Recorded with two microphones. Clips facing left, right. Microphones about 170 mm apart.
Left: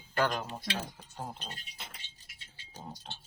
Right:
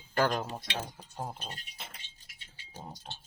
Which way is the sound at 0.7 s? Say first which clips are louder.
Even; 20° right (ahead or behind).